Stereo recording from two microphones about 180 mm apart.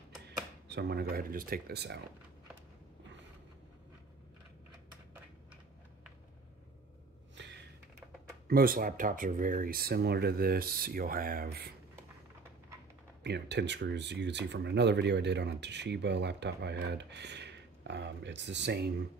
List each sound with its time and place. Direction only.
0.7 s speech: 65° right (ahead or behind)
7.4 s computer keyboard: 80° right
8.5 s speech: 55° right (ahead or behind)
13.2 s speech: 70° right (ahead or behind)